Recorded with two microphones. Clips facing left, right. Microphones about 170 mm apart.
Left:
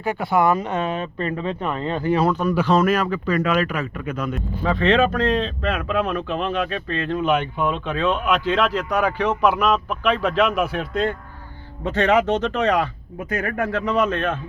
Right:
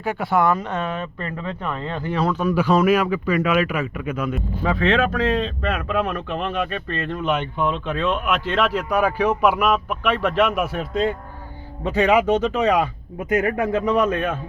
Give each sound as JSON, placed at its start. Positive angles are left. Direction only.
{"t": 0.0, "sound": "speech", "side_deg": -5}
{"t": 2.3, "sound": "speech", "side_deg": -5}